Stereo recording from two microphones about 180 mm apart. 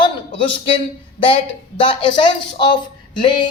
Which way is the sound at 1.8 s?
30° left (ahead or behind).